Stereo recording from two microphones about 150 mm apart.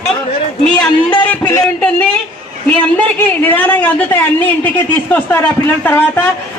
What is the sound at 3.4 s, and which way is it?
A woman's voice, 10° left (ahead or behind).